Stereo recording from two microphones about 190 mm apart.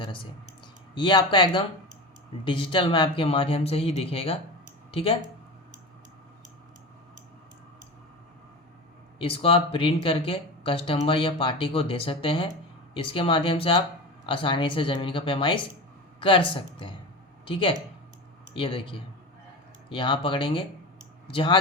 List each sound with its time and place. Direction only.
0.0 s clicking: 25° left (ahead or behind)
0.9 s speech: 25° left (ahead or behind)
9.1 s speech: 30° left (ahead or behind)